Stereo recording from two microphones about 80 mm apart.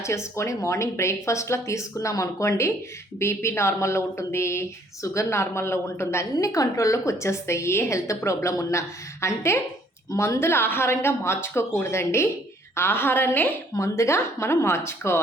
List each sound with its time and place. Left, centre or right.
0.0 s speech: left
6.3 s a woman's voice: left
13.7 s speech: left